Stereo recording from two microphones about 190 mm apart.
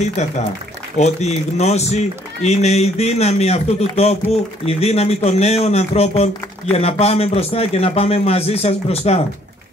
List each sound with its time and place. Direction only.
0.2 s a man's voice: 35° left (ahead or behind)